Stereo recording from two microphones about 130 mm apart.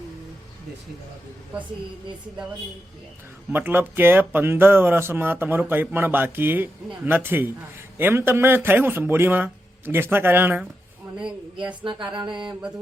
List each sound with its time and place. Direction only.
3.5 s speech: 15° right (ahead or behind)
11.8 s music: 40° right (ahead or behind)